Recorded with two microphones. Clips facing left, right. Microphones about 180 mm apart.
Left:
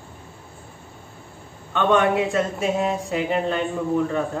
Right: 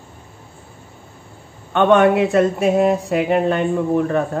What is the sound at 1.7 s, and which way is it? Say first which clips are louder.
Speech: right 6 dB; 65° right (ahead or behind).